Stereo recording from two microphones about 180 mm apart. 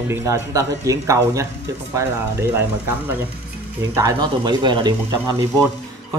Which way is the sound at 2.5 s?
10° right (ahead or behind).